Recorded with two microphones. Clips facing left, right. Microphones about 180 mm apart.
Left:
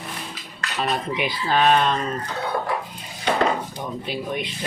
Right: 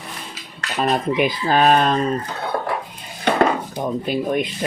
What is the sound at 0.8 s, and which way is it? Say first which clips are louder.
Speech: right 6 dB; 45° right (ahead or behind).